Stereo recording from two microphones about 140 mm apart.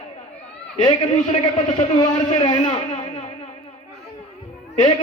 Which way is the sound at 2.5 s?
40° left (ahead or behind).